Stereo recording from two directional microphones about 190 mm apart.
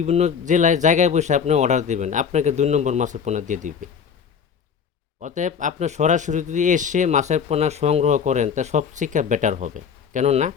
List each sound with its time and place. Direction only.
0.0 s speech: 35° right (ahead or behind)
5.2 s speech: 40° right (ahead or behind)